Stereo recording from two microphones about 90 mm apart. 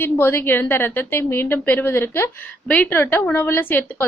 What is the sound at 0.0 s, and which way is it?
A woman's voice, 25° left (ahead or behind).